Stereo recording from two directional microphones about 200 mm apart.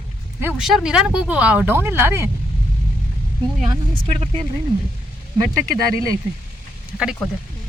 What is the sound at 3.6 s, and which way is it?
Speech, 35° right (ahead or behind).